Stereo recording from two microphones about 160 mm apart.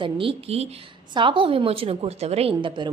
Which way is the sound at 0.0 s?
35° right (ahead or behind).